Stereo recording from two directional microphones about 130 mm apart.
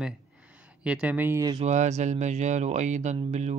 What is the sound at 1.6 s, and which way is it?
Speech, 60° right (ahead or behind).